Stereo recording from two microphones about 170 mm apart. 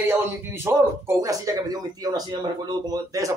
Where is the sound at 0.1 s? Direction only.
15° right (ahead or behind).